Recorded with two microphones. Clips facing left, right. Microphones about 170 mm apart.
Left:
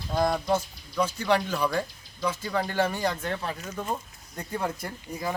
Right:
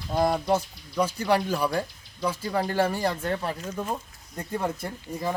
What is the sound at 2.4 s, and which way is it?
Speech, 30° right (ahead or behind).